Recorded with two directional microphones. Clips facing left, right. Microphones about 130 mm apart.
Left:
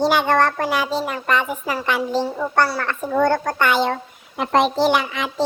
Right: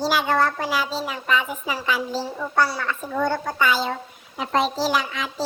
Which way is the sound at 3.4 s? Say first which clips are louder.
Left 3 dB; 65° left (ahead or behind).